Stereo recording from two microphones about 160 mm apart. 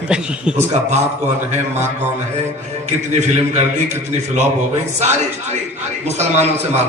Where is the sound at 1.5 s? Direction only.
45° right (ahead or behind).